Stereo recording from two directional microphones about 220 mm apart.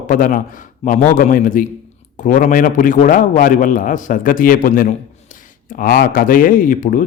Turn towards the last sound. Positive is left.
turn(degrees=35)  # may be behind; listen again after turning